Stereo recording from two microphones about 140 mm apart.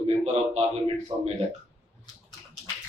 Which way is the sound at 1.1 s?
20° right (ahead or behind).